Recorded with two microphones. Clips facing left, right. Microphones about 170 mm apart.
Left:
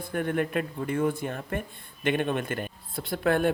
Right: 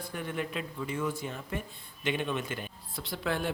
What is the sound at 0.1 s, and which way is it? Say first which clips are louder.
Speech: left 9 dB; 55° left (ahead or behind).